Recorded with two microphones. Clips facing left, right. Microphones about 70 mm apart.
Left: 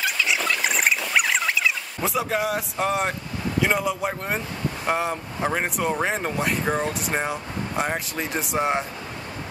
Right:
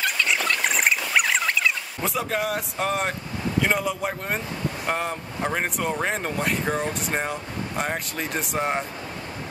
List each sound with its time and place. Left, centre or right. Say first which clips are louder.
0.0 s rodents: even; centre
3.6 s speech: left 3 dB; centre